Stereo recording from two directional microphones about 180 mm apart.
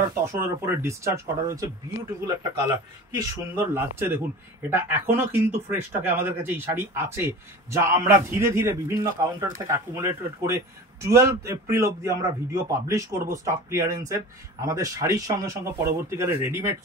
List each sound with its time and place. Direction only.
0.1 s a man's voice: 15° right (ahead or behind)